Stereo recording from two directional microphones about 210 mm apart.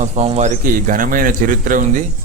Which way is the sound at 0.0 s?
30° right (ahead or behind).